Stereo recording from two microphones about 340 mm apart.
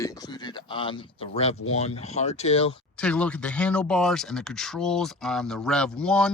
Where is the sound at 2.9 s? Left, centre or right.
Centre.